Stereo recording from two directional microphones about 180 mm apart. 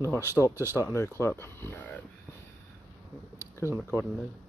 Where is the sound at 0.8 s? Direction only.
10° left (ahead or behind).